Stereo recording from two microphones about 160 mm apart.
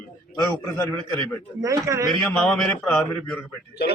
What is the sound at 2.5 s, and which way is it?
Speech, 5° left (ahead or behind).